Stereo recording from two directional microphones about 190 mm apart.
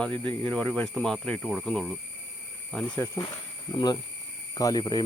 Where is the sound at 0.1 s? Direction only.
25° right (ahead or behind).